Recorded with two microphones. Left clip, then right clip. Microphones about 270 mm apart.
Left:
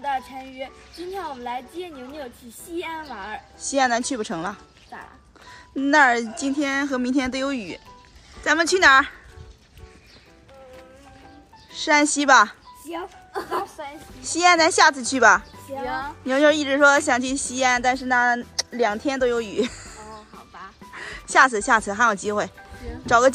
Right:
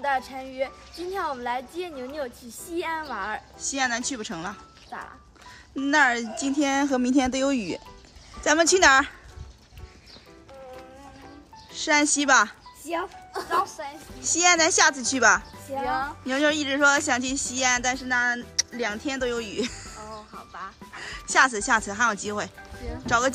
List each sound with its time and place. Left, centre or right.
0.0 s a woman's voice: centre
11.7 s speech: centre
13.3 s a woman's voice: centre
14.2 s a woman's voice: centre